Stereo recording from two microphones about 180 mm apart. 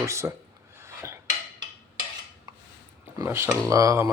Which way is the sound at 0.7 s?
15° right (ahead or behind).